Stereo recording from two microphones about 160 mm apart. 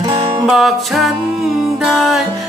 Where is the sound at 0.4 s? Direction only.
Centre (ahead or behind).